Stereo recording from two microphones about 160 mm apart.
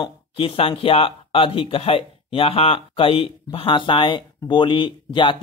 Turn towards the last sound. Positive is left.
turn(degrees=30)  # may be behind; listen again after turning